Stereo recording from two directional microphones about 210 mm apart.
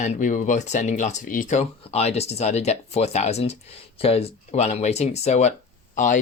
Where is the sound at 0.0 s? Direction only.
35° left (ahead or behind).